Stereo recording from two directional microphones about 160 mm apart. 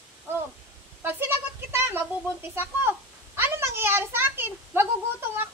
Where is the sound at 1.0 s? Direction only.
10° right (ahead or behind).